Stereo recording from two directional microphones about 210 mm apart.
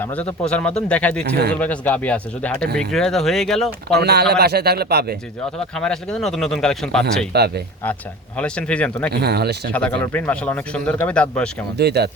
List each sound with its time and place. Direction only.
0.0 s speech: 5° left (ahead or behind)
1.2 s a man's voice: 50° right (ahead or behind)
1.5 s speech: 5° left (ahead or behind)
3.9 s a man's voice: 50° right (ahead or behind)
5.5 s speech: 5° left (ahead or behind)
7.3 s a man's voice: 50° right (ahead or behind)
8.4 s speech: 5° left (ahead or behind)
9.1 s a man's voice: 50° right (ahead or behind)
9.7 s speech: 5° left (ahead or behind)
11.8 s a man's voice: 50° right (ahead or behind)